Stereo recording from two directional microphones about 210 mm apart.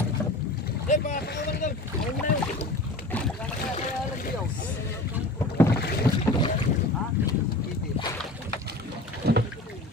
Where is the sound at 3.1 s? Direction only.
5° left (ahead or behind).